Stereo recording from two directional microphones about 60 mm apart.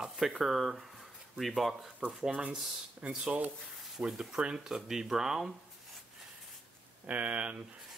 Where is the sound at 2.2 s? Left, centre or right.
Centre.